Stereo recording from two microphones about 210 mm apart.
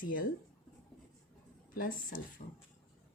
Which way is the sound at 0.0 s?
40° left (ahead or behind).